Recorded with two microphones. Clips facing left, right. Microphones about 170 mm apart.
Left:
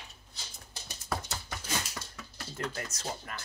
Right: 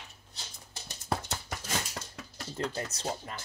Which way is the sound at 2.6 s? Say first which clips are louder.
Right 3 dB; 30° right (ahead or behind).